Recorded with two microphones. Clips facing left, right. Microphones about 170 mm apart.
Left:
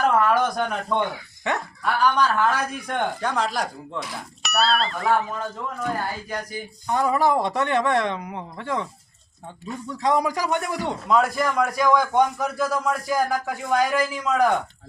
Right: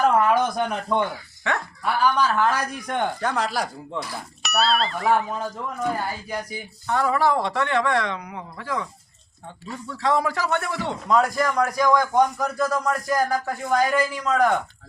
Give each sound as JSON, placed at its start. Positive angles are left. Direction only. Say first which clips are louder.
{"t": 0.2, "sound": "speech", "louder": "even", "side_deg": -5}
{"t": 6.8, "sound": "a man's voice", "louder": "even", "side_deg": 15}
{"t": 11.1, "sound": "speech", "louder": "even", "side_deg": 0}